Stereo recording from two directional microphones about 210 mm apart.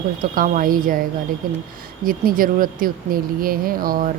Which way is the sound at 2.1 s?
40° right (ahead or behind).